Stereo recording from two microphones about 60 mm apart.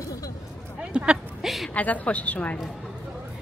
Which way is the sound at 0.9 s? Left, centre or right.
Centre.